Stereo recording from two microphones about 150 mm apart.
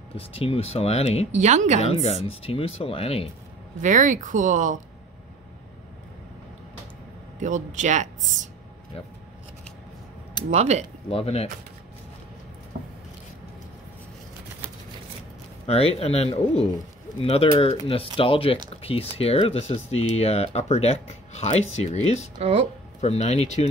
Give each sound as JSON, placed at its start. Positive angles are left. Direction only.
{"t": 0.1, "sound": "speech", "side_deg": 40}
{"t": 1.3, "sound": "speech", "side_deg": -55}
{"t": 1.8, "sound": "speech", "side_deg": 45}
{"t": 3.8, "sound": "speech", "side_deg": -55}
{"t": 7.3, "sound": "speech", "side_deg": -55}
{"t": 10.5, "sound": "speech", "side_deg": -45}
{"t": 11.1, "sound": "speech", "side_deg": 40}
{"t": 15.6, "sound": "speech", "side_deg": 40}
{"t": 22.4, "sound": "speech", "side_deg": -45}
{"t": 22.9, "sound": "speech", "side_deg": 50}